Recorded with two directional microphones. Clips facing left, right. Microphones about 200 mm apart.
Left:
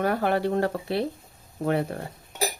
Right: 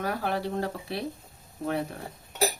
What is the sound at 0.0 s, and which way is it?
Speech, 60° left (ahead or behind).